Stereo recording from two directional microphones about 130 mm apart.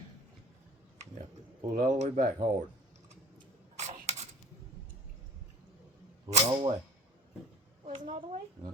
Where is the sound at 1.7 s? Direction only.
85° right.